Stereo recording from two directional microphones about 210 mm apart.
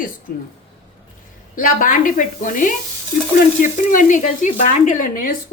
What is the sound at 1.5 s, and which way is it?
A woman's voice, 40° left (ahead or behind).